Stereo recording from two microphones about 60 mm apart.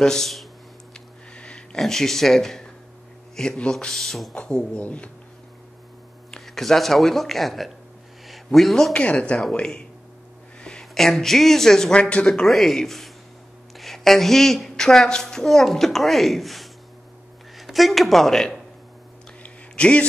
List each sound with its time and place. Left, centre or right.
0.0 s speech: centre
0.9 s a sound: centre
1.8 s a woman's voice: centre
3.7 s a woman's voice: centre
4.4 s a man's voice: centre
6.4 s a woman's voice: centre
8.9 s a man's voice: centre
9.4 s speech: centre
12.4 s a woman's voice: centre
19.4 s a sound: centre